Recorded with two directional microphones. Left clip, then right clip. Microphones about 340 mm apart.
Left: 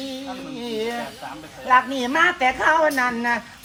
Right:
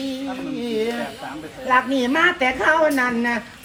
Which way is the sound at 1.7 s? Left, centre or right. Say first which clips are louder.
Even; left.